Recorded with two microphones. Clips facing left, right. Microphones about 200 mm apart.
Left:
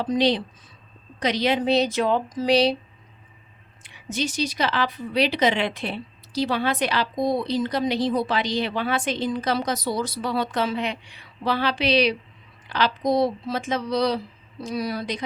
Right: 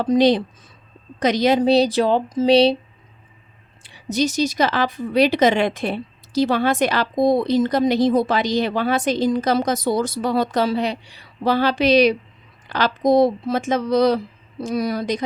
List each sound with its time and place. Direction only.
0.0 s a woman's voice: 45° right (ahead or behind); by 2.7 s 25° right (ahead or behind)
3.8 s speech: 35° right (ahead or behind)